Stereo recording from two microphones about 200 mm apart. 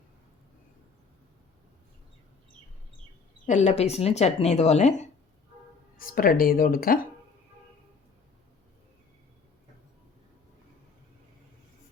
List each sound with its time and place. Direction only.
3.4 s speech: 35° left (ahead or behind)
6.0 s speech: 45° left (ahead or behind)